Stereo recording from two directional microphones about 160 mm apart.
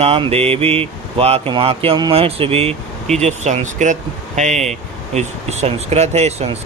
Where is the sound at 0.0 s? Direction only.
40° right (ahead or behind).